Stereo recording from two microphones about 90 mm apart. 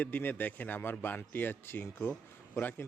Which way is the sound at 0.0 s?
25° left (ahead or behind).